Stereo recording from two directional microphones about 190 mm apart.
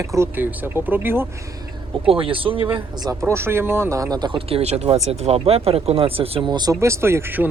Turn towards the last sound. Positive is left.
turn(degrees=-10)  # may be behind; listen again after turning